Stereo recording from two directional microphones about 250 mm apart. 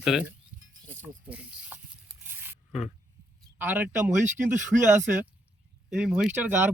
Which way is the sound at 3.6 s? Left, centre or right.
Centre.